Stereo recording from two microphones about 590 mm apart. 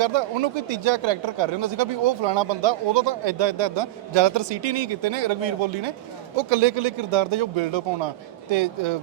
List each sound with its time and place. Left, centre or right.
0.0 s speech: right